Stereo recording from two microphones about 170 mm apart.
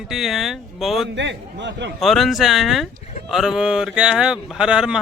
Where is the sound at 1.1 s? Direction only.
90° right.